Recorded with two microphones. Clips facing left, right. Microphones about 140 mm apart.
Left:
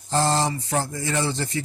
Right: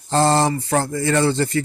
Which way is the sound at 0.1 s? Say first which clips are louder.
Right 5 dB; 70° right (ahead or behind).